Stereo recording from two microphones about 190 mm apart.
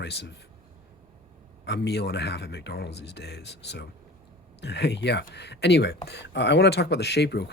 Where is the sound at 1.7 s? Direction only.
60° left (ahead or behind).